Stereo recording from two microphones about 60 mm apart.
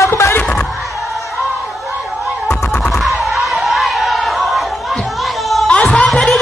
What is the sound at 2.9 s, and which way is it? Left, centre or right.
Crowd, centre.